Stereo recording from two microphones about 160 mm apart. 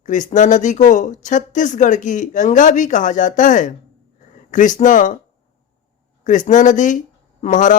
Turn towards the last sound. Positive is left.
turn(degrees=50)  # may be behind; listen again after turning